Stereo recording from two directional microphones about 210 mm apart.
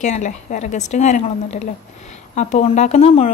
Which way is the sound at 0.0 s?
35° left (ahead or behind).